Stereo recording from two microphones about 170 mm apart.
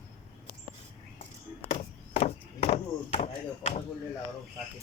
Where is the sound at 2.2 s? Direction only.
35° left (ahead or behind).